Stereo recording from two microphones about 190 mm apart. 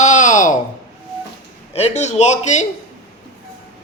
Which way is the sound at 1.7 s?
35° left (ahead or behind).